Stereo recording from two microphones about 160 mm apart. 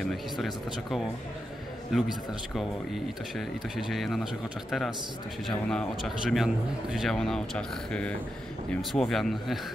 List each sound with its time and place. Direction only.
0.1 s speech: centre (ahead or behind)